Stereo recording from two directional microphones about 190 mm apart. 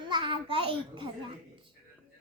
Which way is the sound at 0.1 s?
25° right (ahead or behind).